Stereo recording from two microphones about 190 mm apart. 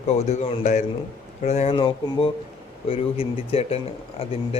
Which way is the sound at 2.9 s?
30° left (ahead or behind).